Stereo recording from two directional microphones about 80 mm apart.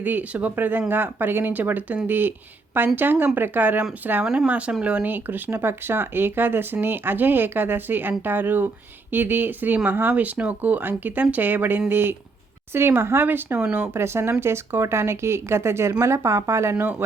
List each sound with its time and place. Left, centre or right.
0.0 s speech: right